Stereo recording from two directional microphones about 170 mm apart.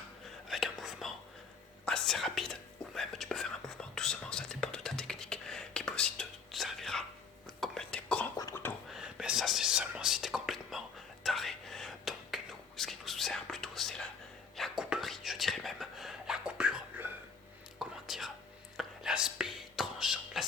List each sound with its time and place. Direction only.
0.4 s whispering: centre (ahead or behind)
8.4 s a sound: 15° left (ahead or behind)
8.9 s whispering: 5° right (ahead or behind)